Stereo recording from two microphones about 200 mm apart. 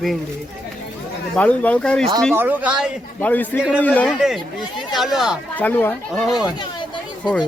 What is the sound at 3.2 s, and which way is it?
Speech, 10° left (ahead or behind).